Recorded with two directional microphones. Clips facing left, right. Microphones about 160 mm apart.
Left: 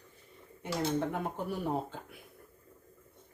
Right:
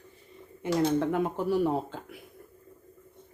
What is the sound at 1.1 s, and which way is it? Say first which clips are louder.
Speech: right 8 dB; 90° right.